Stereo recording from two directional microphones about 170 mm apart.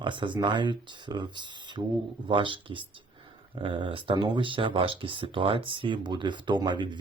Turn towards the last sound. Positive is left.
turn(degrees=-25)  # may be behind; listen again after turning